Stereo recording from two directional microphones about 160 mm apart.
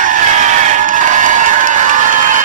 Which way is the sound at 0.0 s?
55° right (ahead or behind).